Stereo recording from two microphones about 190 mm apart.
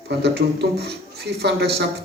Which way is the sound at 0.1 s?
60° right (ahead or behind).